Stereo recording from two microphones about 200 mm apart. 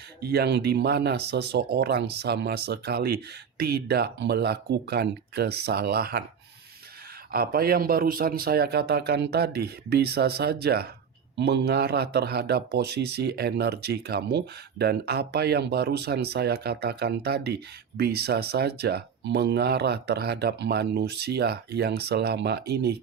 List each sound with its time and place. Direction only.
0.2 s a man's voice: 55° right (ahead or behind)
7.3 s a man's voice: 50° right (ahead or behind)